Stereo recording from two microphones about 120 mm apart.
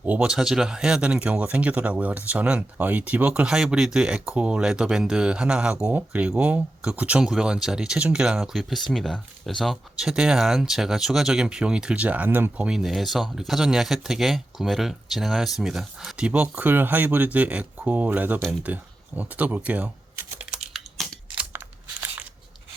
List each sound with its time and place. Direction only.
0.0 s speech: 10° right (ahead or behind)
18.6 s typing: 15° right (ahead or behind)
22.0 s a sound: 15° right (ahead or behind)